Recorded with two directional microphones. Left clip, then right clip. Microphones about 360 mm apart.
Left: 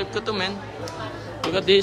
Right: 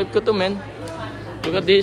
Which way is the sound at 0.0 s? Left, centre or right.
Centre.